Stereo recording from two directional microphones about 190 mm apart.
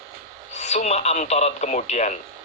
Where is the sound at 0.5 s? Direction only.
35° left (ahead or behind).